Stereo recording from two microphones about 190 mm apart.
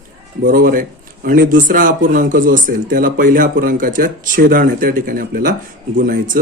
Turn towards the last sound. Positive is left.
turn(degrees=-45)  # may be behind; listen again after turning